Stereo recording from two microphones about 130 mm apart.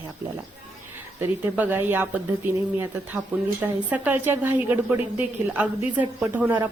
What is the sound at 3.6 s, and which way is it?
A woman's voice, 15° right (ahead or behind).